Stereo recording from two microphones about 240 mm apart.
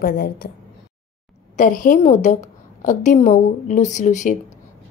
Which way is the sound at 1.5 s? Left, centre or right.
Left.